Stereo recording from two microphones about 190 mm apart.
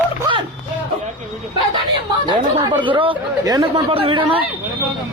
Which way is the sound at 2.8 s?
25° right (ahead or behind).